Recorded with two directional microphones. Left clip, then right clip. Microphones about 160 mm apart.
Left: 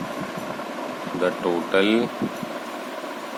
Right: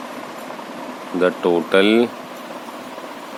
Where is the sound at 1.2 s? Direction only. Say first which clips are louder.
Right 6 dB; 55° right (ahead or behind).